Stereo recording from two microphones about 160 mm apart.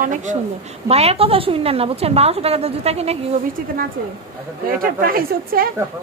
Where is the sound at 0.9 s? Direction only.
40° right (ahead or behind).